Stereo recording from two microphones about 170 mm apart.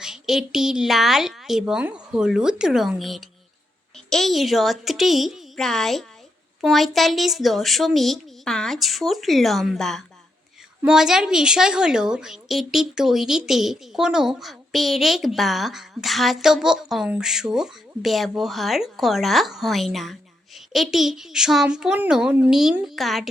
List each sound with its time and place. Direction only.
0.0 s a woman's voice: 5° right (ahead or behind)